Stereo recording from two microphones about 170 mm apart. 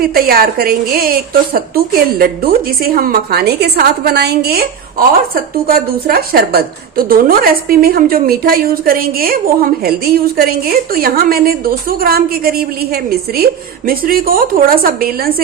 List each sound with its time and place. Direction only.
0.0 s a woman's voice: 60° right (ahead or behind)